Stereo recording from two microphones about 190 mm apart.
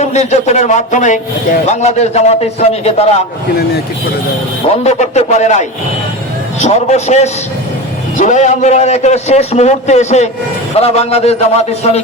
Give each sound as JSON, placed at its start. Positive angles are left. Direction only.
{"t": 0.0, "sound": "a man's voice", "side_deg": 35}
{"t": 4.7, "sound": "a man's voice", "side_deg": 35}